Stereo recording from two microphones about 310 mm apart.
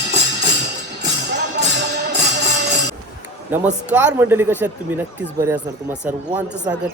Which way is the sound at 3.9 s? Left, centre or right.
Centre.